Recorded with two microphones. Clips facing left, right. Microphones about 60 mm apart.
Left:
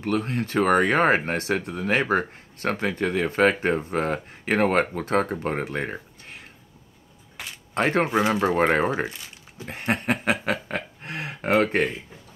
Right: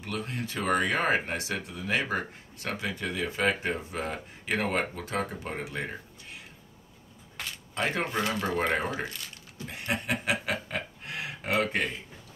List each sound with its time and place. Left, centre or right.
0.0 s speech: left
7.4 s a sound: centre
7.7 s speech: left
8.0 s speech: left
8.5 s speech: left
9.0 s speech: centre
9.7 s speech: left
10.4 s a sound: left